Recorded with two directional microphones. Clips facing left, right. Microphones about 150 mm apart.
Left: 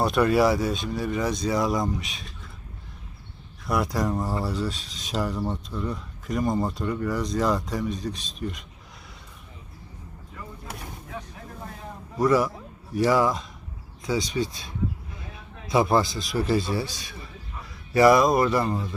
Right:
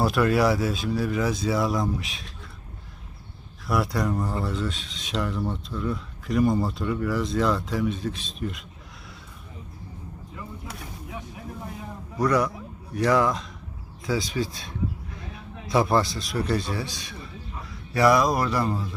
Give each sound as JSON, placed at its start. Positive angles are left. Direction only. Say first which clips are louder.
{"t": 0.0, "sound": "speech", "louder": "left 1 dB", "side_deg": 0}
{"t": 3.7, "sound": "speech", "louder": "even", "side_deg": 0}
{"t": 6.4, "sound": "speech", "louder": "right 3 dB", "side_deg": 20}
{"t": 6.7, "sound": "speech", "louder": "right 1 dB", "side_deg": 0}
{"t": 12.1, "sound": "a man's voice", "louder": "left 2 dB", "side_deg": 0}